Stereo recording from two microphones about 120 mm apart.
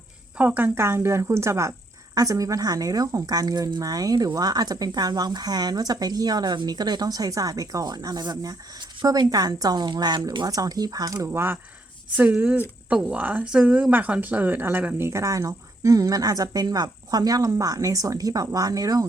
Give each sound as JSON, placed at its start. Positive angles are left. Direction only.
{"t": 0.3, "sound": "a woman's voice", "side_deg": -15}